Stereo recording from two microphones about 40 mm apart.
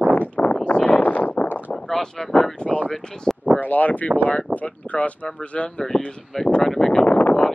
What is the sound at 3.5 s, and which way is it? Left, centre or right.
Speech, left.